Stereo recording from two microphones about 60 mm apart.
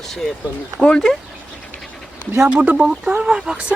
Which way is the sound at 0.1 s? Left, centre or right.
Centre.